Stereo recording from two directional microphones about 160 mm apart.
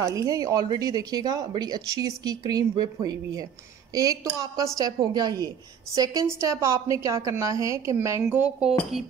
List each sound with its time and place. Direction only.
0.0 s speech: 20° right (ahead or behind)